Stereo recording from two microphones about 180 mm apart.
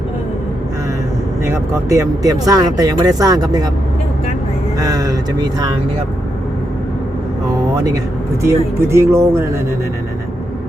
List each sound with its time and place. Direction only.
1.5 s speech: 15° right (ahead or behind)
4.8 s speech: 20° right (ahead or behind)
8.4 s speech: 15° right (ahead or behind)